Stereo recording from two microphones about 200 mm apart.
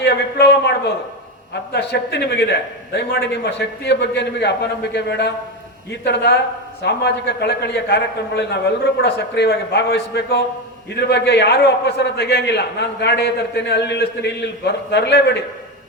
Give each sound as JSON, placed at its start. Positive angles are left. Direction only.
{"t": 0.0, "sound": "a man's voice", "side_deg": 55}
{"t": 1.7, "sound": "a man's voice", "side_deg": 55}